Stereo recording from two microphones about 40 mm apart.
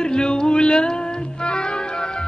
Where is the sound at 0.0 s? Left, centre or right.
Left.